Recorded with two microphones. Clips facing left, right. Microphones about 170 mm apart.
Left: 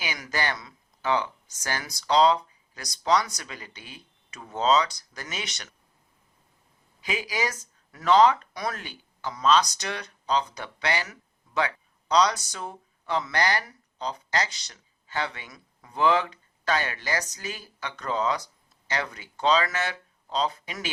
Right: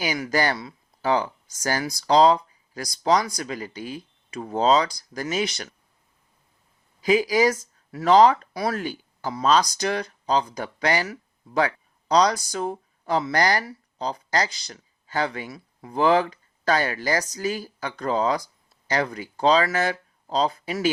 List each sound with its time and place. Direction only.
0.0 s speech: 35° right (ahead or behind)
7.0 s speech: 35° right (ahead or behind)